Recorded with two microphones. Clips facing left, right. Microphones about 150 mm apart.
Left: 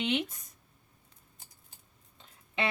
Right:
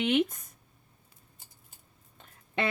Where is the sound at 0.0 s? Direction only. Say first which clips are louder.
Right 5 dB; 50° right (ahead or behind).